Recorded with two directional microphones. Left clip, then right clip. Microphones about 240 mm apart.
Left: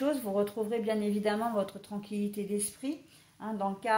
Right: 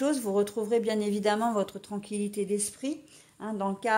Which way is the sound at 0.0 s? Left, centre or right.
Right.